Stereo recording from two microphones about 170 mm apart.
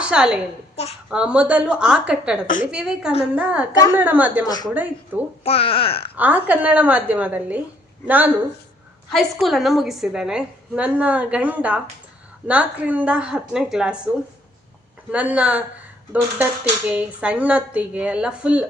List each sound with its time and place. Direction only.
0.0 s a woman's voice: 5° right (ahead or behind)
4.4 s a woman's voice: 25° left (ahead or behind)
4.7 s speech: 10° right (ahead or behind)
5.4 s a child's voice: 35° left (ahead or behind)
6.1 s a woman's voice: 10° right (ahead or behind)
15.1 s speech: 5° right (ahead or behind)